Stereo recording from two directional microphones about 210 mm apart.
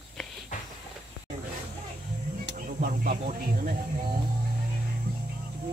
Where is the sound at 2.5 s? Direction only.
40° right (ahead or behind).